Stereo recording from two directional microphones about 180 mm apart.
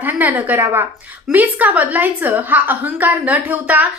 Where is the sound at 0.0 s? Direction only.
10° right (ahead or behind).